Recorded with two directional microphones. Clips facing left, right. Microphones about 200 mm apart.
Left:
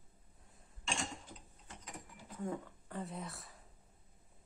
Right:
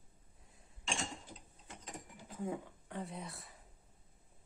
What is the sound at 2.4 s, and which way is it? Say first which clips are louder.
Speech: even; 5° right (ahead or behind).